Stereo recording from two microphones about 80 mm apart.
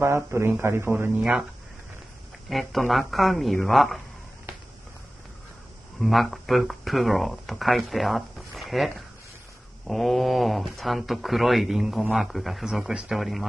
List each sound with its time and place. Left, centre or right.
0.0 s speech: right
2.5 s speech: centre
5.9 s speech: centre